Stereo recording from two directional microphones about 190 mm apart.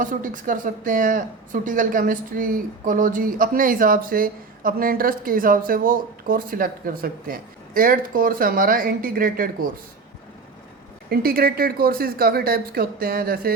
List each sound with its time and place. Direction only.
0.0 s speech: 45° right (ahead or behind)
11.1 s speech: 50° right (ahead or behind)